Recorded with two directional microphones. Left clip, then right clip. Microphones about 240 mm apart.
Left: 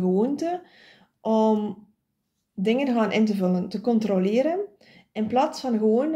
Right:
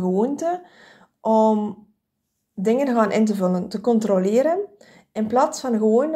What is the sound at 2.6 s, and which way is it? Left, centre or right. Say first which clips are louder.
Speech: right 4 dB; centre.